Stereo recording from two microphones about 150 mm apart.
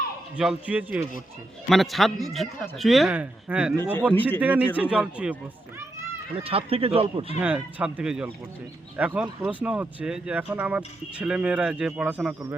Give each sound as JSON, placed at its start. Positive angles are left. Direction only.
{"t": 0.3, "sound": "speech", "side_deg": -10}
{"t": 1.7, "sound": "a man's voice", "side_deg": 0}
{"t": 4.1, "sound": "a man's voice", "side_deg": 10}
{"t": 4.4, "sound": "speech", "side_deg": -10}
{"t": 6.4, "sound": "speech", "side_deg": -40}
{"t": 7.3, "sound": "speech", "side_deg": -10}